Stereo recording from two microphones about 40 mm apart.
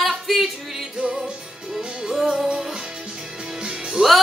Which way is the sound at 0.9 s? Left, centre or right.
Centre.